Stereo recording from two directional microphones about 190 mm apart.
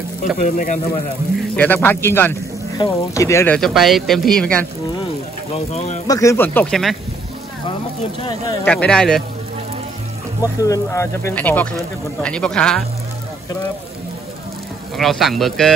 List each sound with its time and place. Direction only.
0.4 s speech: 45° left (ahead or behind)
1.6 s speech: 10° left (ahead or behind)
3.5 s speech: centre (ahead or behind)
5.0 s a sound: 35° left (ahead or behind)
6.0 s speech: 15° left (ahead or behind); by 7.0 s centre (ahead or behind)
7.6 s speech: 30° left (ahead or behind)
8.6 s speech: 5° left (ahead or behind)
10.4 s speech: 20° left (ahead or behind)
15.0 s speech: centre (ahead or behind)